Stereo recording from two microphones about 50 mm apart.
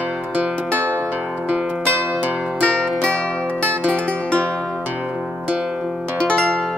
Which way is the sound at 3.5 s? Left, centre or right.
Left.